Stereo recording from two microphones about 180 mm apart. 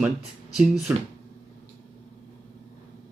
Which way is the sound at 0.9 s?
10° right (ahead or behind).